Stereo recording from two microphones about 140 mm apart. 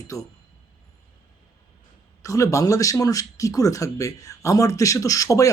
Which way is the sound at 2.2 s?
25° left (ahead or behind).